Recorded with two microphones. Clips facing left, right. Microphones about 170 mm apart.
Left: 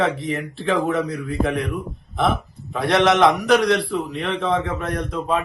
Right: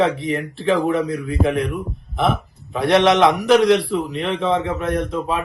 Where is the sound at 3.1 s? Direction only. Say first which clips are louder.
Right 2 dB; centre (ahead or behind).